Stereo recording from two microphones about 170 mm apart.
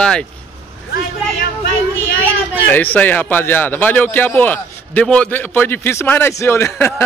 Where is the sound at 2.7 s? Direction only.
10° left (ahead or behind).